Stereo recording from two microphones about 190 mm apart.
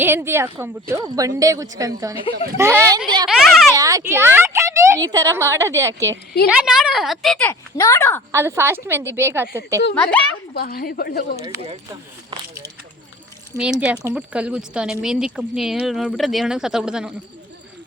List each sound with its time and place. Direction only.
0.0 s a woman's voice: 10° right (ahead or behind)
2.3 s speech: 55° right (ahead or behind)
2.6 s a woman's voice: 15° right (ahead or behind)
3.2 s a child's voice: centre (ahead or behind)
3.8 s a woman's voice: 15° right (ahead or behind)
6.5 s speech: 5° right (ahead or behind)
7.8 s a woman's voice: 15° left (ahead or behind)
8.3 s a woman's voice: 15° right (ahead or behind)
9.9 s a woman's voice: 10° left (ahead or behind)
10.5 s a woman's voice: 55° left (ahead or behind)
11.4 s speech: 30° right (ahead or behind)
12.3 s speech: 20° right (ahead or behind)
13.6 s speech: 5° right (ahead or behind)